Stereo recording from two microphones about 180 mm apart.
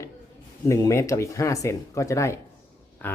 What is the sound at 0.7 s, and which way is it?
Speech, 15° left (ahead or behind).